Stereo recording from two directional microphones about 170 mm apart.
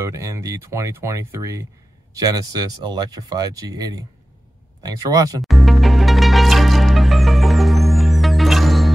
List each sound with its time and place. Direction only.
0.0 s speech: 20° right (ahead or behind)
5.4 s music: centre (ahead or behind)